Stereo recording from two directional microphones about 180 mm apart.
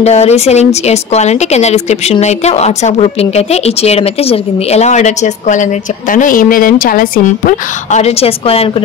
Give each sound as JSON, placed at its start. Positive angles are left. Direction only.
{"t": 0.0, "sound": "speech", "side_deg": 35}